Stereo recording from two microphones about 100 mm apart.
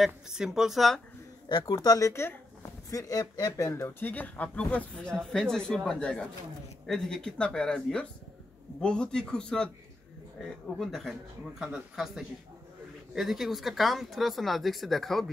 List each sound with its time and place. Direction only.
0.0 s speech: 5° right (ahead or behind)
1.5 s speech: 45° left (ahead or behind); by 15.2 s centre (ahead or behind)